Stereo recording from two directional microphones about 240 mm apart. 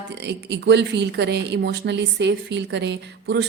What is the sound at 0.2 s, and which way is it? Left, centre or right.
Speech, right.